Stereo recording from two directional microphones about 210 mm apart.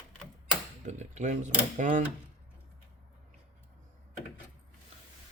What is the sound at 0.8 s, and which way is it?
Speech, 35° right (ahead or behind).